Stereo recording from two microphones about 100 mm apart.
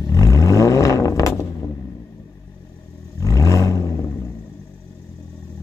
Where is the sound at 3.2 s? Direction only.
30° left (ahead or behind).